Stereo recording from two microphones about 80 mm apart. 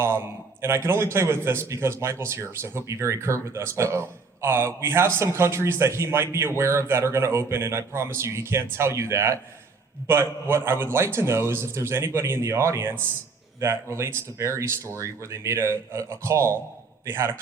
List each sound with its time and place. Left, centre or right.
0.0 s speech: right